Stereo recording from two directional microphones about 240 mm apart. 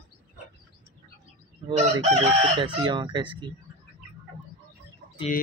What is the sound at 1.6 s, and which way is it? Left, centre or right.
Chicken, right.